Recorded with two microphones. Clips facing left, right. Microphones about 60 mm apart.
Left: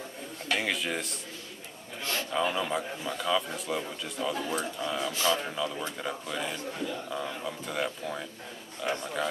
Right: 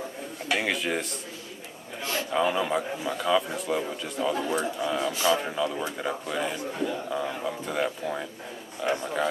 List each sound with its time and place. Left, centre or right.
0.5 s a man's voice: centre
2.0 s a man's voice: right
2.4 s a man's voice: centre